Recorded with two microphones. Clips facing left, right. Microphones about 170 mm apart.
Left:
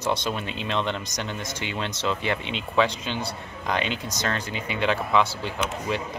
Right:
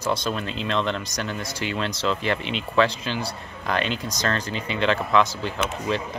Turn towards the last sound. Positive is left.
turn(degrees=15)  # may be behind; listen again after turning